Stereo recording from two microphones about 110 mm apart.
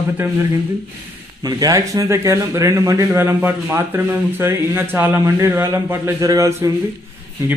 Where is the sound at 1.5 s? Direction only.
35° right (ahead or behind).